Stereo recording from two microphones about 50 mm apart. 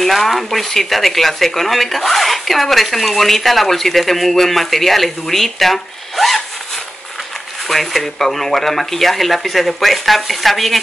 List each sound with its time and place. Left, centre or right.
0.0 s speech: centre
7.6 s speech: centre